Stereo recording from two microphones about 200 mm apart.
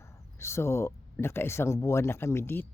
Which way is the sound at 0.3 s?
15° left (ahead or behind).